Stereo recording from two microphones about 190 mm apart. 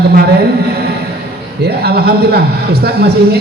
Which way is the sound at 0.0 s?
55° right (ahead or behind).